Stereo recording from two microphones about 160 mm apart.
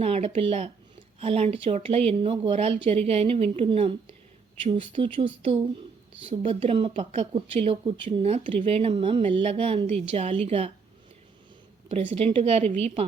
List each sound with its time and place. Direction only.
0.0 s speech: 40° right (ahead or behind)
6.2 s speech: 35° right (ahead or behind)
11.9 s speech: 40° right (ahead or behind)